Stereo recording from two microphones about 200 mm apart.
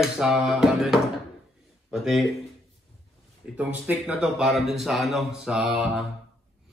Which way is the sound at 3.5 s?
10° right (ahead or behind).